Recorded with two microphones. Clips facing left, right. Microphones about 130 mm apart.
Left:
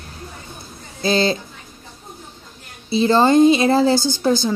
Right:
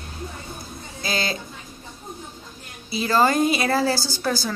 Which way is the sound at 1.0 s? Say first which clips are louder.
Left 9 dB; 30° left (ahead or behind).